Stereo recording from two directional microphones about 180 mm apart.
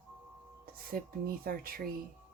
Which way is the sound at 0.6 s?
55° right (ahead or behind).